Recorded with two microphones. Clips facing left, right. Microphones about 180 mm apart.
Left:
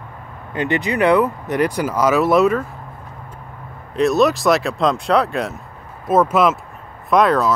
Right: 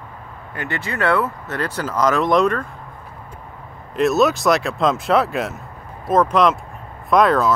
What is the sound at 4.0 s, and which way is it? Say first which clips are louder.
Speech: left 1 dB; centre (ahead or behind).